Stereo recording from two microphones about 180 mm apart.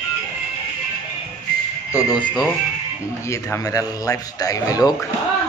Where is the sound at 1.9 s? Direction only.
20° left (ahead or behind).